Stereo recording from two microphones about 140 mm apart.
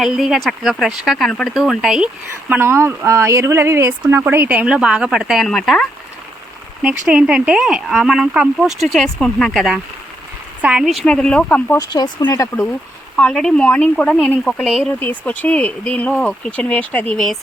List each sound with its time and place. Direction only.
0.0 s speech: 5° right (ahead or behind)
2.5 s speech: 15° right (ahead or behind); by 5.9 s 5° left (ahead or behind)
7.1 s speech: 5° right (ahead or behind); by 11.8 s 10° left (ahead or behind)
11.8 s speech: 30° left (ahead or behind)
13.1 s speech: 5° left (ahead or behind)